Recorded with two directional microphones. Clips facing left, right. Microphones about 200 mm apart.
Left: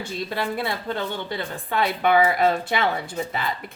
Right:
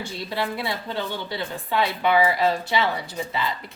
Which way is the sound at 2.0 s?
50° left (ahead or behind).